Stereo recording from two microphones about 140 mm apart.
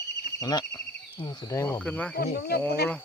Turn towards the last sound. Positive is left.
turn(degrees=10)  # may be behind; listen again after turning